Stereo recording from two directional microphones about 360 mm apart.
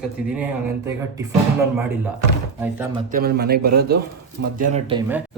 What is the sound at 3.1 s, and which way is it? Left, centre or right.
A man's voice, right.